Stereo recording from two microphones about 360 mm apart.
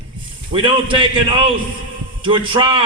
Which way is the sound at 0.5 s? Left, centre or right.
Centre.